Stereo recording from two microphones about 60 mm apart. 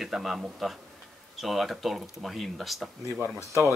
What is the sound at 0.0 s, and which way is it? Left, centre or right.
Speech, centre.